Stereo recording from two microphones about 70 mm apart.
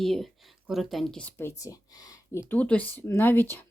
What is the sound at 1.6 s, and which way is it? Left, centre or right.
Speech, left.